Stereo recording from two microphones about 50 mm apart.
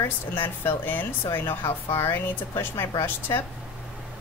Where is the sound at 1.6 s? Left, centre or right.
Left.